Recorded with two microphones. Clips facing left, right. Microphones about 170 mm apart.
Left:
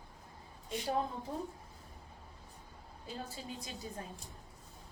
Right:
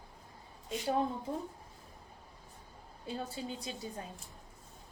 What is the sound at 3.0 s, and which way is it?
Speech, 30° right (ahead or behind).